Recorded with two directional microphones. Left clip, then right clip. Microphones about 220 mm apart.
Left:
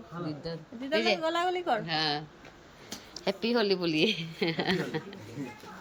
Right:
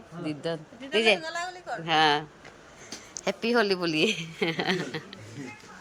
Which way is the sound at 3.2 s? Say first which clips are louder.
Right 3 dB; centre (ahead or behind).